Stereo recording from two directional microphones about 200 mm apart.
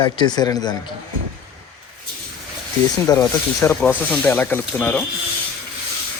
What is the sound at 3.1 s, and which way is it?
Speech, 15° left (ahead or behind).